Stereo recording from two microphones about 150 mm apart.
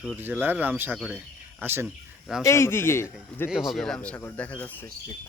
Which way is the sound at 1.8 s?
5° right (ahead or behind).